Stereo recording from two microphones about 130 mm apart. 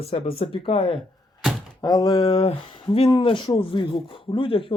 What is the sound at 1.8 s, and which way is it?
Speech, 30° left (ahead or behind).